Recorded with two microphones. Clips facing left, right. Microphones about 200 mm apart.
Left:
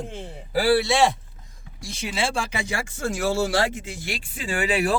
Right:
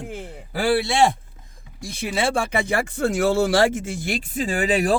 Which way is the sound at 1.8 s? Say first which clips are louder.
Right 3 dB; 55° right (ahead or behind).